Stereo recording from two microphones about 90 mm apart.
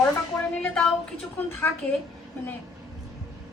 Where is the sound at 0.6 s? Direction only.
10° left (ahead or behind).